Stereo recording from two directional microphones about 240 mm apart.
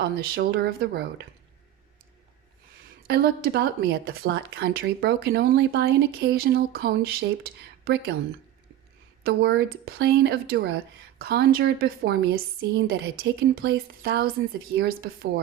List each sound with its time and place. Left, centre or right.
0.0 s speech: right
3.1 s speech: right
9.2 s a woman's voice: right